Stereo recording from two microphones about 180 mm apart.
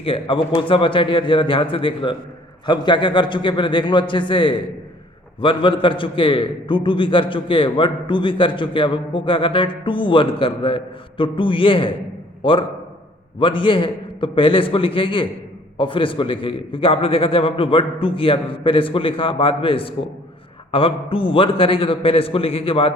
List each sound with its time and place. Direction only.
0.0 s a man's voice: 30° left (ahead or behind)